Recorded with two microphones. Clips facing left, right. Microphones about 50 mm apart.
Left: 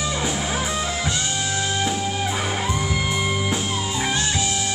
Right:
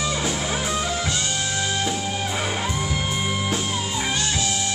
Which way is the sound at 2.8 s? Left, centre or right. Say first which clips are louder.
Left 2 dB; centre.